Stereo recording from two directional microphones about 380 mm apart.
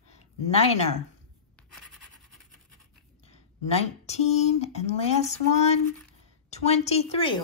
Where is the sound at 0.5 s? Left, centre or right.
Centre.